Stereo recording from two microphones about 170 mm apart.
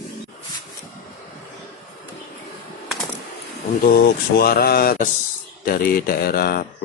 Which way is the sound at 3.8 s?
65° left (ahead or behind).